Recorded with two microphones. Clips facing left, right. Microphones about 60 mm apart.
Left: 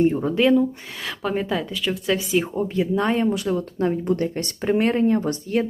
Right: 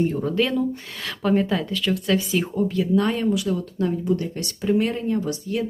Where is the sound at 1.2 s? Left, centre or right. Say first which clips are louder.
Right 3 dB; centre.